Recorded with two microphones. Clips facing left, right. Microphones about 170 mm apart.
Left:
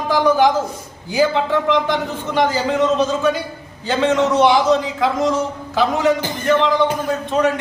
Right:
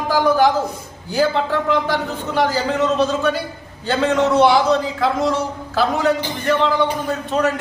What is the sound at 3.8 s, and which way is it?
A man's voice, centre (ahead or behind).